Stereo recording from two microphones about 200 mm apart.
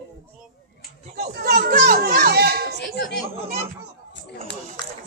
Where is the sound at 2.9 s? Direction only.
55° left (ahead or behind).